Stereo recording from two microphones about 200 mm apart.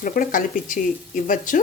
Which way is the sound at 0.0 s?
45° left (ahead or behind).